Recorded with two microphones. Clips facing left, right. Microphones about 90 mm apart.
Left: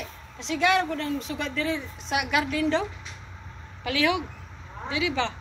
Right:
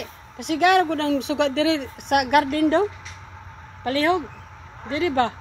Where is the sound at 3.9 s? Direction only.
40° right (ahead or behind).